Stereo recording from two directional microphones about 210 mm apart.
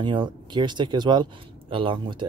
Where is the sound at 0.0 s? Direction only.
20° right (ahead or behind).